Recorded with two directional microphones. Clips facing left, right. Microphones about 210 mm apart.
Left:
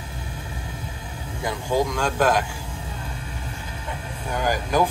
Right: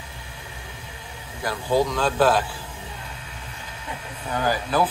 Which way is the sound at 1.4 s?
15° left (ahead or behind).